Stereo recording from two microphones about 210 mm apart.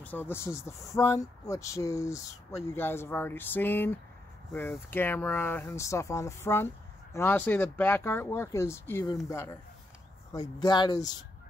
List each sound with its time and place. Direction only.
0.0 s speech: 10° left (ahead or behind)